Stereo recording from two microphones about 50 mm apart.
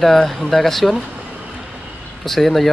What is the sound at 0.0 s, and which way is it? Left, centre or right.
Speech, centre.